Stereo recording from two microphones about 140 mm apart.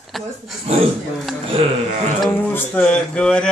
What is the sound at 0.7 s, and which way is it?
Speech, 50° right (ahead or behind).